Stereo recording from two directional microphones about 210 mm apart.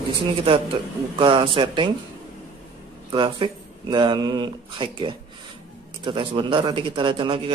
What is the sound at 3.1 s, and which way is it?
Speech, 25° right (ahead or behind).